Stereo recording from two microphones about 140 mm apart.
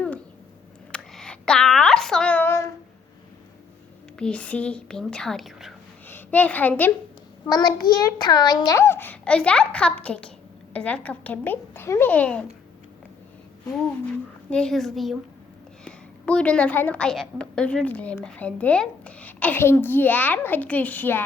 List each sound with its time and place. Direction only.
0.9 s a sound: 5° left (ahead or behind)
4.2 s speech: 10° left (ahead or behind)
6.1 s a child's voice: 15° left (ahead or behind)
7.4 s a woman's voice: 30° left (ahead or behind); by 12.5 s 10° left (ahead or behind)
14.5 s a woman's voice: 5° left (ahead or behind)